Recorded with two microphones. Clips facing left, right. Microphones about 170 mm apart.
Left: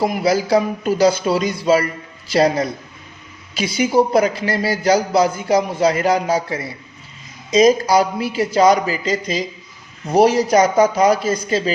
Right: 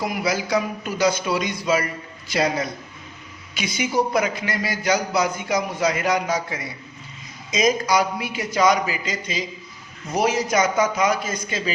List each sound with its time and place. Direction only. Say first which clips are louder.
0.0 s a man's voice: left 7 dB; 30° left (ahead or behind)